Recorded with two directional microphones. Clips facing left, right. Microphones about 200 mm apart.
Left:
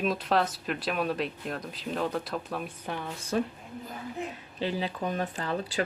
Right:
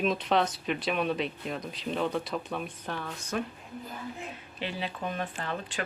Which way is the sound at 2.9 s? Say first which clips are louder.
Left 2 dB; 15° left (ahead or behind).